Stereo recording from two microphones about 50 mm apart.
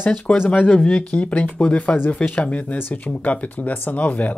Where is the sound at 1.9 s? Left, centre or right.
Left.